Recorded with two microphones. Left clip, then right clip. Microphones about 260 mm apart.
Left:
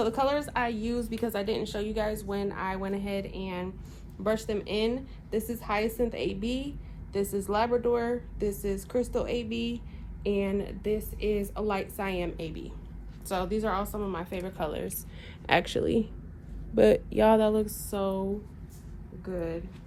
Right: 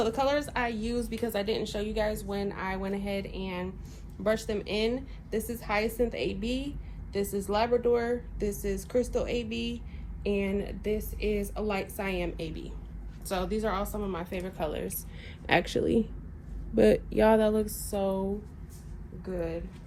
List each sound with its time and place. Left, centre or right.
0.0 s a woman's voice: centre